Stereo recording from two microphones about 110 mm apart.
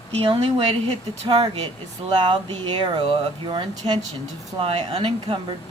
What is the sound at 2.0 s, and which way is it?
Speech, 50° right (ahead or behind).